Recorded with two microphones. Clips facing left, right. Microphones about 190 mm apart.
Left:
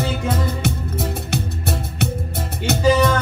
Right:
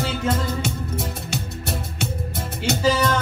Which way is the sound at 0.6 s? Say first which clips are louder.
Left 3 dB; 60° left (ahead or behind).